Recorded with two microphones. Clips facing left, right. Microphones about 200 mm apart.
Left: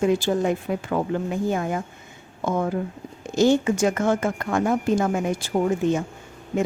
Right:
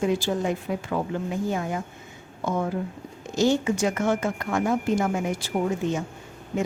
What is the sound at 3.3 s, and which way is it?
A woman's voice, 55° left (ahead or behind).